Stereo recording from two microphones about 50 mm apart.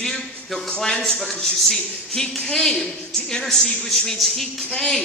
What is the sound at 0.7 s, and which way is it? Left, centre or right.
A woman's voice, centre.